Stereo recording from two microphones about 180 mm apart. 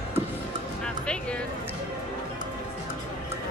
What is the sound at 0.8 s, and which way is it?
Music, 5° left (ahead or behind).